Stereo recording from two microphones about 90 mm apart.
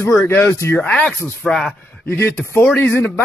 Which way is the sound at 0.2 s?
20° left (ahead or behind).